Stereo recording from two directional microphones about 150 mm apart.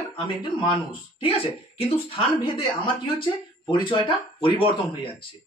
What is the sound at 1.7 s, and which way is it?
Speech, 40° left (ahead or behind).